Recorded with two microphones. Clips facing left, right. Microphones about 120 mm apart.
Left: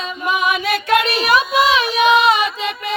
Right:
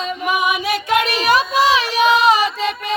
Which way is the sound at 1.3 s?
35° right (ahead or behind).